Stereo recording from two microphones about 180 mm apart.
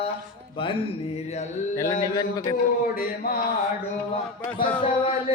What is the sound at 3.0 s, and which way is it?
Mantra, 55° left (ahead or behind).